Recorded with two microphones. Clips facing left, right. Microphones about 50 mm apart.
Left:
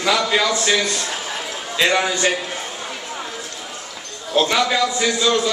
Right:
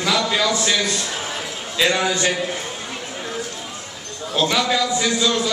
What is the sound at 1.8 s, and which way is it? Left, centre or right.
Speech, centre.